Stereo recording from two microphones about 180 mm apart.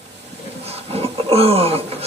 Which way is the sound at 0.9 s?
35° right (ahead or behind).